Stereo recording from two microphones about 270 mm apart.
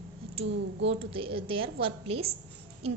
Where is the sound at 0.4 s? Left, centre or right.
Right.